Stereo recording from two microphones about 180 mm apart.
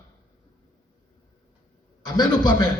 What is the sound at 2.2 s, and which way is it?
Speech, 25° left (ahead or behind).